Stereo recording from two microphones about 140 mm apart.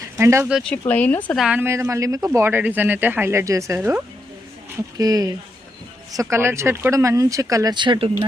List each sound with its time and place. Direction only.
0.2 s speech: 20° right (ahead or behind)
0.6 s speech: 10° left (ahead or behind)
1.4 s speech: 5° right (ahead or behind)
1.6 s speech: 20° right (ahead or behind)
3.8 s speech: 10° right (ahead or behind)
4.9 s speech: 25° right (ahead or behind)